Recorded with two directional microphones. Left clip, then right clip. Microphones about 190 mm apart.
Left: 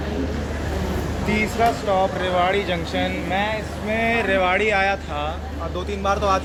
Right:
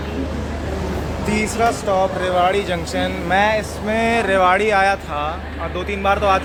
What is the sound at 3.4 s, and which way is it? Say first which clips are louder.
Speech: right 7 dB; 30° right (ahead or behind).